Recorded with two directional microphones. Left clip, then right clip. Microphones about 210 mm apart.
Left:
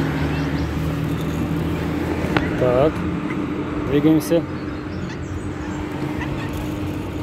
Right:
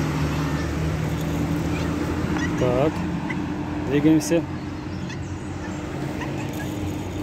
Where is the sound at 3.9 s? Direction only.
5° right (ahead or behind).